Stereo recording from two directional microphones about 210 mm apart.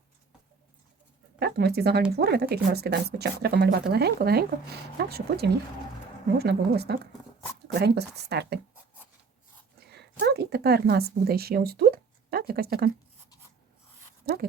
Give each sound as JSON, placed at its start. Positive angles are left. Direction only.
{"t": 1.4, "sound": "speech", "side_deg": -50}
{"t": 9.8, "sound": "speech", "side_deg": -50}
{"t": 14.3, "sound": "speech", "side_deg": -45}